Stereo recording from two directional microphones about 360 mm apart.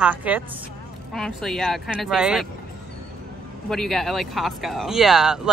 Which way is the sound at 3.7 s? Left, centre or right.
Centre.